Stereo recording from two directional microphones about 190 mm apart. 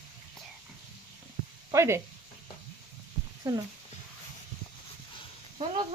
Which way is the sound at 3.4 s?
15° right (ahead or behind).